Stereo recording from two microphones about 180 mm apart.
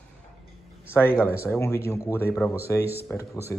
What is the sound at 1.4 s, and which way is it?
Speech, 15° left (ahead or behind).